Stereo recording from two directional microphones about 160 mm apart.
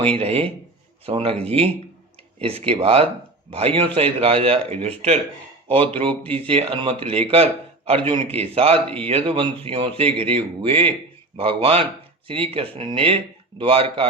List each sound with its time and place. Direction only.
0.0 s speech: 35° right (ahead or behind)